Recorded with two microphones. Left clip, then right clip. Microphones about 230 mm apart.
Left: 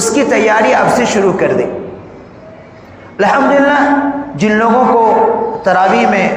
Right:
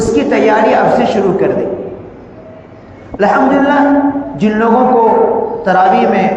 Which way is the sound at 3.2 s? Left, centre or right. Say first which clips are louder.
Left 1 dB; left.